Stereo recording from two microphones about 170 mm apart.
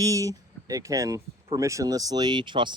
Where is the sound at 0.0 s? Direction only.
20° right (ahead or behind).